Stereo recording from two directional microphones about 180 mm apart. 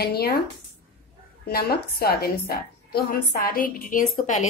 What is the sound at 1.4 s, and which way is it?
A woman's voice, 60° left (ahead or behind).